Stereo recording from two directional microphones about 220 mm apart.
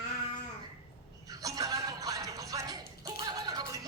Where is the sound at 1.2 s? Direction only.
15° right (ahead or behind).